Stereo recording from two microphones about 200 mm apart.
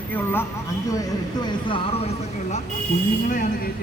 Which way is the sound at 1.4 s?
25° left (ahead or behind).